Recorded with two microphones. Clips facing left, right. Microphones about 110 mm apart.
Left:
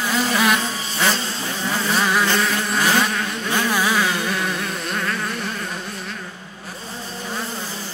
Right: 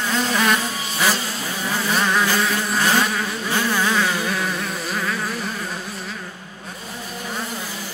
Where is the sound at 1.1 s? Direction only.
30° left (ahead or behind).